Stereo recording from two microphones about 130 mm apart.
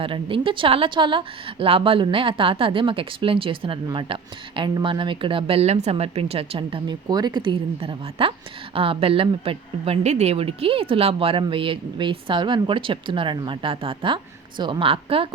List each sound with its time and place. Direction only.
0.0 s speech: 40° right (ahead or behind)